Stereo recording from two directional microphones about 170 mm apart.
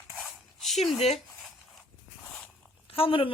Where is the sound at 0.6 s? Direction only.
Centre (ahead or behind).